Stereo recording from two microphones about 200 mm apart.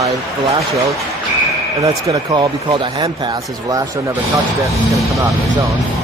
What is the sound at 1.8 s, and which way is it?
Speech, 15° right (ahead or behind).